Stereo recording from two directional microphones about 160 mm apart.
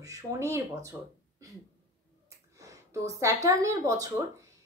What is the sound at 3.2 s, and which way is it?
Speech, 20° right (ahead or behind).